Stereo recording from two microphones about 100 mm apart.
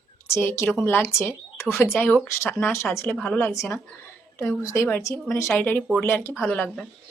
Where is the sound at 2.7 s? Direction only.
25° left (ahead or behind).